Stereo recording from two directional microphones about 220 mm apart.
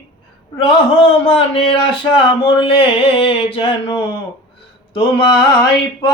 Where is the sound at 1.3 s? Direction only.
25° left (ahead or behind).